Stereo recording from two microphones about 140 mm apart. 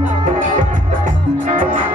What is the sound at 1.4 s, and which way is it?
Music, 70° right (ahead or behind).